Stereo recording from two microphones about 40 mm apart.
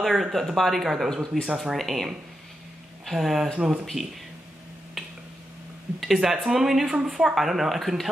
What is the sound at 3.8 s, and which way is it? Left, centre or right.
Speech, centre.